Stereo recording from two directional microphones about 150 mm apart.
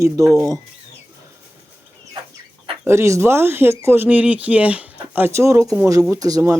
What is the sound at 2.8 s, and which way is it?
Speech, 15° right (ahead or behind).